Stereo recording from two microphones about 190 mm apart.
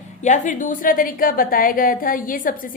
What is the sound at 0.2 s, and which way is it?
A woman's voice, 40° left (ahead or behind).